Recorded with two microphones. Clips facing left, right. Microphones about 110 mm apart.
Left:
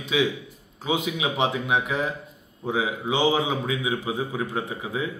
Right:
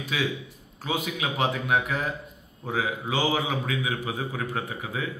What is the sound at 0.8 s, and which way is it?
A man's voice, 15° left (ahead or behind).